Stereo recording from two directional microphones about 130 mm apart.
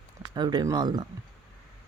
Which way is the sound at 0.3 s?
30° right (ahead or behind).